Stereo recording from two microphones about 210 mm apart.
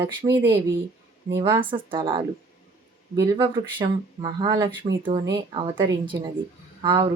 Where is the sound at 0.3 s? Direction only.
15° right (ahead or behind).